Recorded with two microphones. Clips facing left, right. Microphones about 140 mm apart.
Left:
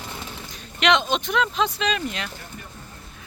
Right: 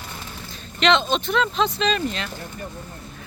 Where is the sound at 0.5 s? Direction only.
10° left (ahead or behind).